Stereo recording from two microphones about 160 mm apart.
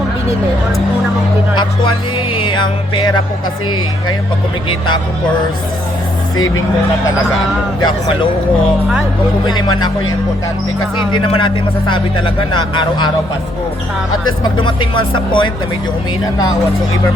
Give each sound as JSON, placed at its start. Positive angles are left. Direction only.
{"t": 1.5, "sound": "music", "side_deg": 30}
{"t": 9.5, "sound": "music", "side_deg": 25}
{"t": 11.1, "sound": "speech", "side_deg": 30}
{"t": 14.4, "sound": "speech", "side_deg": 30}